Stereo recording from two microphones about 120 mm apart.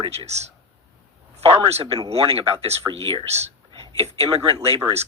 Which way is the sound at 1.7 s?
60° right (ahead or behind).